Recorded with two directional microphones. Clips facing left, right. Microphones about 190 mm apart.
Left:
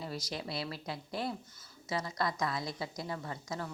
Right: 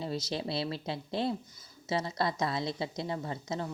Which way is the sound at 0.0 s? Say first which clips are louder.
Right 5 dB; 25° right (ahead or behind).